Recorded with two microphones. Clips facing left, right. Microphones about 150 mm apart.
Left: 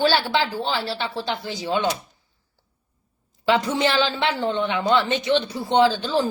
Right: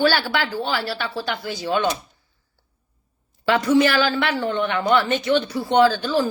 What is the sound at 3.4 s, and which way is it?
A woman's voice, 20° left (ahead or behind).